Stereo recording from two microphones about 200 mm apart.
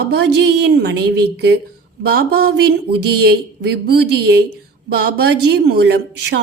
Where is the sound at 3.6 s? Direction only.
55° right (ahead or behind).